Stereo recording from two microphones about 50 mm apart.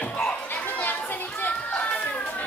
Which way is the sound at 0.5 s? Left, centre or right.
Left.